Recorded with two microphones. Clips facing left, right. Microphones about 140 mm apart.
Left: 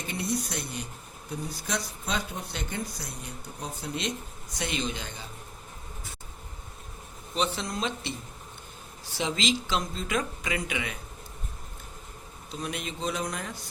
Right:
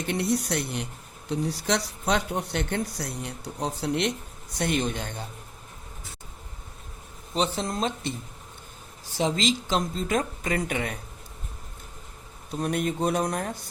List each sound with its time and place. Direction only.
0.1 s speech: 65° right (ahead or behind)
1.3 s speech: 75° right (ahead or behind)
4.5 s speech: 55° right (ahead or behind)
7.3 s speech: 40° right (ahead or behind)
9.1 s speech: 40° right (ahead or behind)
12.5 s speech: 50° right (ahead or behind)